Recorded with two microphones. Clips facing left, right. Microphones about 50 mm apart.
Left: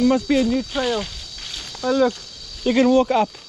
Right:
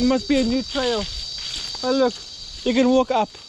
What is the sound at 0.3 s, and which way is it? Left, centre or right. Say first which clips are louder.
Speech: left 1 dB; left.